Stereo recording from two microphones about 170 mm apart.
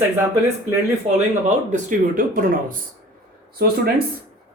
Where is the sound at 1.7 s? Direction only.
50° right (ahead or behind).